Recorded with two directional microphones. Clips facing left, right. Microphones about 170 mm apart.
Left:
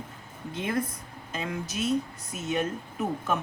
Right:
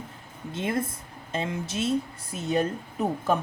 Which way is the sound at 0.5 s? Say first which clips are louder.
Right 1 dB; 25° right (ahead or behind).